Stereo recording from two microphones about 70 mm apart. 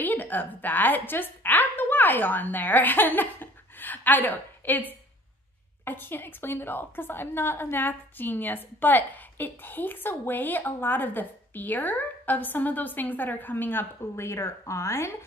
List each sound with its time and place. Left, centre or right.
0.0 s a woman's voice: left